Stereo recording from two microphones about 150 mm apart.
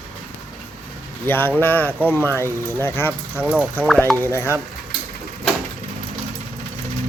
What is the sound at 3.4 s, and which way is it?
Speech, 5° right (ahead or behind).